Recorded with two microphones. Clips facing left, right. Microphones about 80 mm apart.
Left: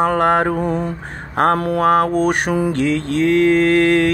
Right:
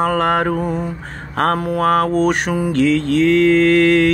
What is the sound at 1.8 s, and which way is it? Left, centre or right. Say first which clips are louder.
Mantra: right 1 dB; left.